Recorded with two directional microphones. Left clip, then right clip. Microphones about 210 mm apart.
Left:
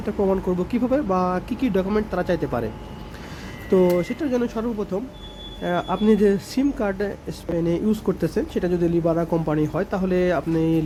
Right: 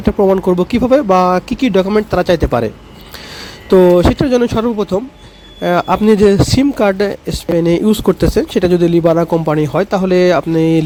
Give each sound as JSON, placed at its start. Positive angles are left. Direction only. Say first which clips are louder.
{"t": 0.0, "sound": "speech", "louder": "right 11 dB", "side_deg": -40}
{"t": 3.7, "sound": "speech", "louder": "right 11 dB", "side_deg": -40}